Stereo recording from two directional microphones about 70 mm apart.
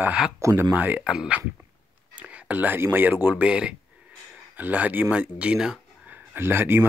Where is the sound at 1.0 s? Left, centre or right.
Centre.